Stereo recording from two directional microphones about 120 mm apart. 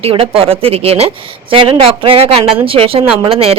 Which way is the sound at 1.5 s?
45° right (ahead or behind).